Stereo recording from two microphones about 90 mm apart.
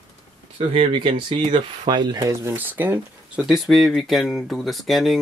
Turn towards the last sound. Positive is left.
turn(degrees=0)  # may be behind; listen again after turning